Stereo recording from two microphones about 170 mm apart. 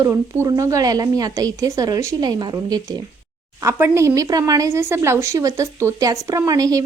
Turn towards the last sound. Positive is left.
turn(degrees=-20)  # may be behind; listen again after turning